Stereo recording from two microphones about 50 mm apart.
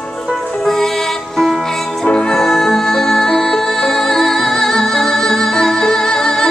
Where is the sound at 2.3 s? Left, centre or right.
Centre.